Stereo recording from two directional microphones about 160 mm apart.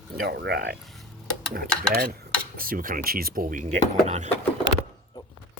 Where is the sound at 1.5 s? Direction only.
65° right (ahead or behind); by 4.3 s 45° right (ahead or behind).